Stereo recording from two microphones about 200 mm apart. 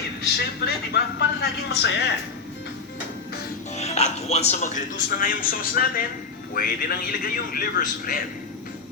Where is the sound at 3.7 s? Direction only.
30° left (ahead or behind).